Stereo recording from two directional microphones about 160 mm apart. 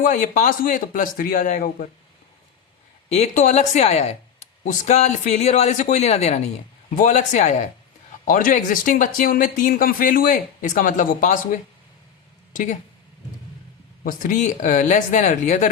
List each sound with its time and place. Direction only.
0.0 s speech: 55° left (ahead or behind)
3.1 s a woman's voice: 45° left (ahead or behind)
8.2 s speech: 60° left (ahead or behind)
14.0 s a woman's voice: 55° left (ahead or behind)